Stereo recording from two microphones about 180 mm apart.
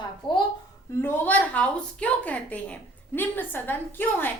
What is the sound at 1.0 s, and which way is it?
A woman's voice, 10° left (ahead or behind).